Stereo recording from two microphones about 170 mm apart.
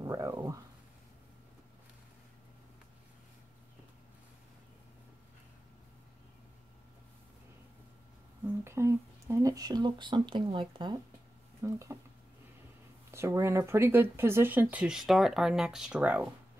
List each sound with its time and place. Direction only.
0.0 s speech: 20° right (ahead or behind)
8.6 s speech: 15° right (ahead or behind)
11.6 s speech: 15° right (ahead or behind)
13.1 s speech: 15° right (ahead or behind)